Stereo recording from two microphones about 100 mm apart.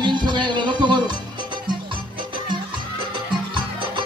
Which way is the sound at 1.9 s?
55° right (ahead or behind).